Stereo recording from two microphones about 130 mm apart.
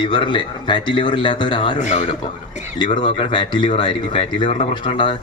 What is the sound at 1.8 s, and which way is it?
Speech, 65° left (ahead or behind).